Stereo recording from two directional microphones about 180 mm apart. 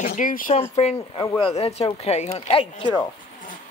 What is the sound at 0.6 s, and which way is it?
Speech, 35° left (ahead or behind).